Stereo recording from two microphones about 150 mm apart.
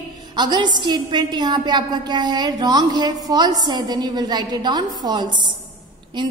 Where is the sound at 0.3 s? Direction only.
30° right (ahead or behind).